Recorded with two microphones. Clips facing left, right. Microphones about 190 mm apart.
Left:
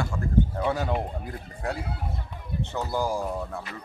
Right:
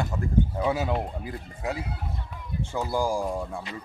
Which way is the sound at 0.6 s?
5° right (ahead or behind).